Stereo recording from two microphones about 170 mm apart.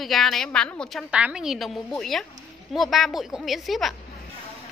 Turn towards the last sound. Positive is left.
turn(degrees=0)  # may be behind; listen again after turning